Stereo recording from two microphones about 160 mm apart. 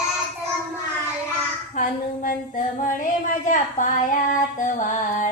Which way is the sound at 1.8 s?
60° left (ahead or behind).